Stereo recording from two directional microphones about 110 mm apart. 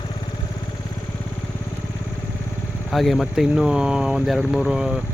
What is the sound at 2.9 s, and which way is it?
Speech, centre (ahead or behind).